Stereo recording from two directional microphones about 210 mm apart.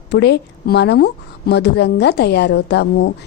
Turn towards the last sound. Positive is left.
turn(degrees=50)  # may be behind; listen again after turning